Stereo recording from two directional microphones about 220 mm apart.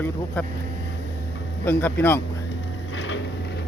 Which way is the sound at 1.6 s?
10° left (ahead or behind).